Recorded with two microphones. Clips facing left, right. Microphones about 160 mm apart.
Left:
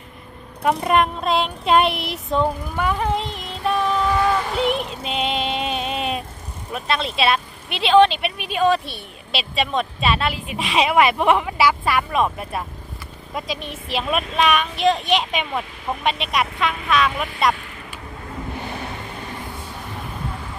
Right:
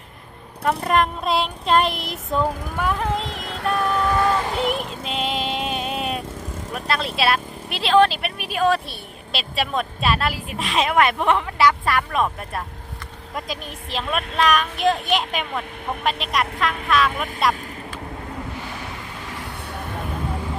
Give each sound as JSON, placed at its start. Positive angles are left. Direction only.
{"t": 0.6, "sound": "speech", "side_deg": 5}
{"t": 3.5, "sound": "music", "side_deg": -60}
{"t": 4.5, "sound": "music", "side_deg": 0}
{"t": 6.7, "sound": "speech", "side_deg": 0}
{"t": 13.9, "sound": "speech", "side_deg": 10}